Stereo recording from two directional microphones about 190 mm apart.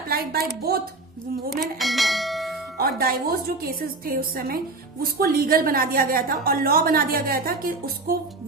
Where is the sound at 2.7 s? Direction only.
50° right (ahead or behind).